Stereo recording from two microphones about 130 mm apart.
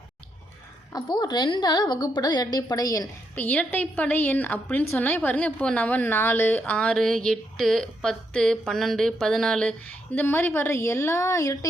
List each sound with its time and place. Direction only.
0.9 s a woman's voice: 35° left (ahead or behind)
3.3 s a woman's voice: 10° left (ahead or behind)